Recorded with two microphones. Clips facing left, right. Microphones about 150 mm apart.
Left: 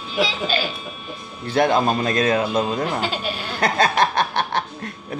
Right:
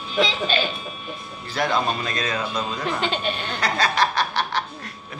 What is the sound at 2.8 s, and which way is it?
Speech, 5° left (ahead or behind).